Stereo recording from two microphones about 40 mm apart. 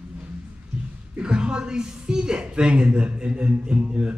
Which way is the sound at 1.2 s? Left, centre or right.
Right.